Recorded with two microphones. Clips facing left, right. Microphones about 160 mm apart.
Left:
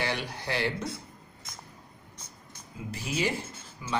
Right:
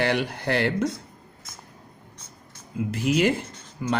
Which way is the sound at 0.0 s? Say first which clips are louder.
Right 8 dB; 60° right (ahead or behind).